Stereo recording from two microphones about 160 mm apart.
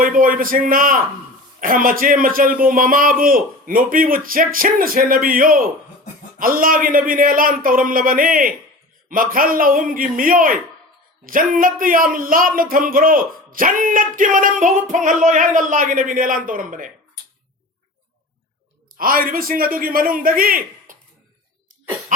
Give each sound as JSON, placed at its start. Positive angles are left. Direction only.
{"t": 0.0, "sound": "speech", "side_deg": -60}
{"t": 18.9, "sound": "speech", "side_deg": -65}